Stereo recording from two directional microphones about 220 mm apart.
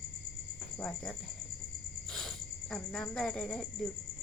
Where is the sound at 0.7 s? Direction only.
5° left (ahead or behind).